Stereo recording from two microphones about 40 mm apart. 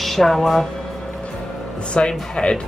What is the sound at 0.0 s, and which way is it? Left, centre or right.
Speech, centre.